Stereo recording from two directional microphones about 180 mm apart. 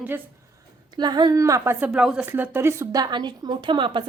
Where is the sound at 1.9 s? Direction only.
5° right (ahead or behind); by 4.0 s 25° right (ahead or behind).